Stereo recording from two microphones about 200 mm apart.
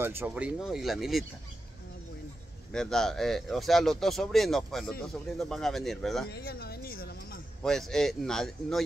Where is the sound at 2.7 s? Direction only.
5° left (ahead or behind).